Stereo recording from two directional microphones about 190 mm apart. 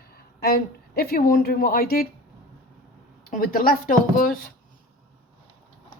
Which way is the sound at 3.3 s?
45° left (ahead or behind).